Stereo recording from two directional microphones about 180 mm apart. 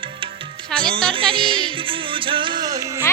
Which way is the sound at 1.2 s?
30° right (ahead or behind).